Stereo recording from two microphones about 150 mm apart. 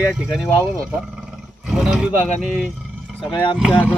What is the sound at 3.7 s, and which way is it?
Speech, 15° left (ahead or behind).